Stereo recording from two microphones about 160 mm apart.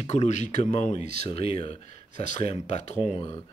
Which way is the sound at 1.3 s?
35° left (ahead or behind).